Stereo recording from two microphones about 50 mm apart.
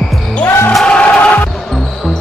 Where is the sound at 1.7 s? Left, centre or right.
Centre.